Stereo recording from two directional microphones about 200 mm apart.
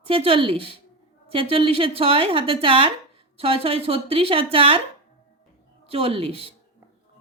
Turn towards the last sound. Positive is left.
turn(degrees=-30)  # may be behind; listen again after turning